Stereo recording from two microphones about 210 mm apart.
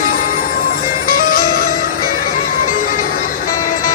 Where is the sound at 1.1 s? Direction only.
40° left (ahead or behind).